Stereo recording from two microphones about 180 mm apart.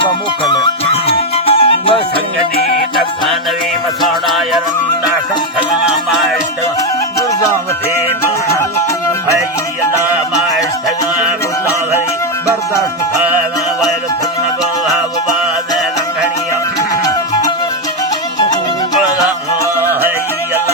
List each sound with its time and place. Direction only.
1.0 s music: 30° left (ahead or behind)
4.0 s music: centre (ahead or behind)
16.9 s music: 20° left (ahead or behind)